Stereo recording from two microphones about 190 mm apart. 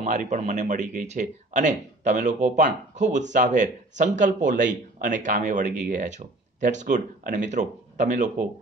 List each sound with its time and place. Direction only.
0.0 s speech: 40° right (ahead or behind)